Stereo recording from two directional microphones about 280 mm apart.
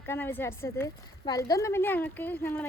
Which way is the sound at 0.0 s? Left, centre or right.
Centre.